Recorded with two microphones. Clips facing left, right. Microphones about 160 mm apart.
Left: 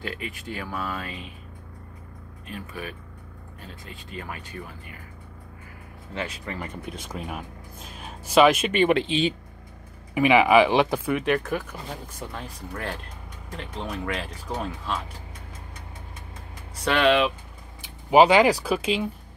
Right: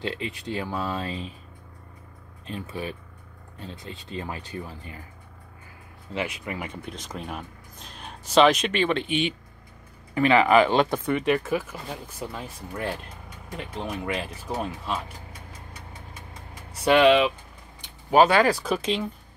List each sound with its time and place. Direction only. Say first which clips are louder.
0.0 s speech: right 3 dB; 25° right (ahead or behind)
2.4 s speech: right 3 dB; 25° right (ahead or behind)
6.1 s speech: right 2 dB; 15° right (ahead or behind)
6.7 s speech: left 1 dB; centre (ahead or behind)
8.9 s speech: left 3 dB; 30° left (ahead or behind)
10.1 s speech: left 1 dB; 10° left (ahead or behind); by 15.0 s 5° right (ahead or behind)
16.8 s speech: right 3 dB; 10° right (ahead or behind)
17.8 s speech: left 2 dB; 15° left (ahead or behind)
18.6 s speech: left 1 dB; 5° left (ahead or behind)